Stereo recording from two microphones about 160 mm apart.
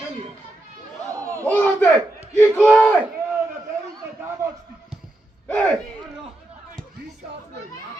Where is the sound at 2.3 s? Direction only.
15° left (ahead or behind).